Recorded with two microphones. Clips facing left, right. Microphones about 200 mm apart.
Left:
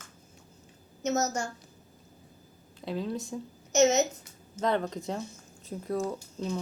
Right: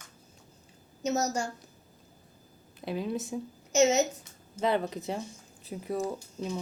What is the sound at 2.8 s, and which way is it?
A woman's voice, 10° right (ahead or behind).